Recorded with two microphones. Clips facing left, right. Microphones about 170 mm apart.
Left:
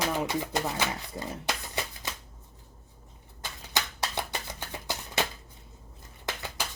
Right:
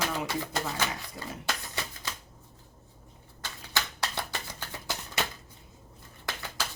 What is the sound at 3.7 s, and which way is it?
Shuffling cards, 20° left (ahead or behind).